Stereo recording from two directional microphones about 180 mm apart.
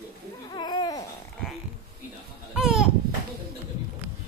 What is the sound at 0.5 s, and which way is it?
Babbling, 25° left (ahead or behind).